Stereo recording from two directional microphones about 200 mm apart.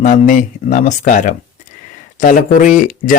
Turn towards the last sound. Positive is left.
turn(degrees=40)  # may be behind; listen again after turning